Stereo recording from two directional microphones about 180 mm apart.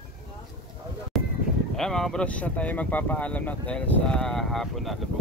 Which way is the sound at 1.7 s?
Centre (ahead or behind).